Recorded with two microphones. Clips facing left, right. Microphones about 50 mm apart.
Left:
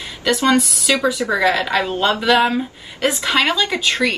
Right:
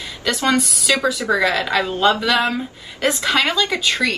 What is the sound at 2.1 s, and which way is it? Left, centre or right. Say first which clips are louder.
Speech: left 3 dB; centre.